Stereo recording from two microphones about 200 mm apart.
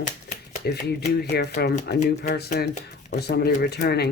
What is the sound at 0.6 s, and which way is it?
Speech, 55° left (ahead or behind).